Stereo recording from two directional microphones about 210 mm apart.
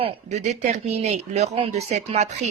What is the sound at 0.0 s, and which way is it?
Speech, 30° right (ahead or behind).